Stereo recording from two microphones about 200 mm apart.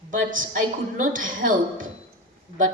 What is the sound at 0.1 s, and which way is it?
A man's voice, 40° right (ahead or behind).